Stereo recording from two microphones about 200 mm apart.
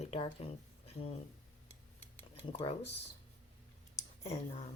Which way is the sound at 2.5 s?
30° left (ahead or behind).